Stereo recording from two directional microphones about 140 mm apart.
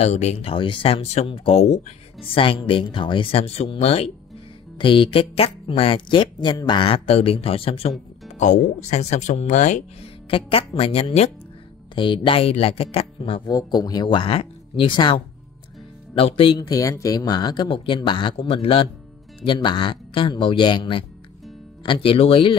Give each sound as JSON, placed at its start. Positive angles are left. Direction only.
{"t": 0.0, "sound": "speech", "side_deg": 50}
{"t": 8.4, "sound": "speech", "side_deg": 55}
{"t": 10.3, "sound": "speech", "side_deg": 40}
{"t": 11.9, "sound": "speech", "side_deg": 35}
{"t": 13.5, "sound": "speech", "side_deg": 30}